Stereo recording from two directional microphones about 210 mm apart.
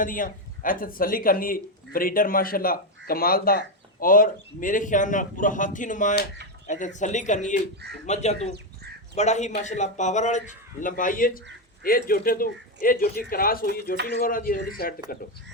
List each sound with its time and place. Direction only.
0.0 s a man's voice: 40° left (ahead or behind)
8.5 s crow: 50° right (ahead or behind)
9.1 s a man's voice: 35° left (ahead or behind)